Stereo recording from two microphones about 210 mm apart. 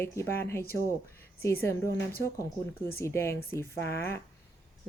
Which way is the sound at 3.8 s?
50° left (ahead or behind).